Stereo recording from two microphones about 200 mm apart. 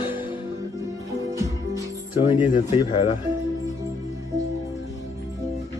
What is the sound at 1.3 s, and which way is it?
Music, 15° right (ahead or behind).